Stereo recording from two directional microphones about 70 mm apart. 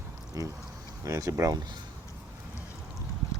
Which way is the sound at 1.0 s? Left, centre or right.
Right.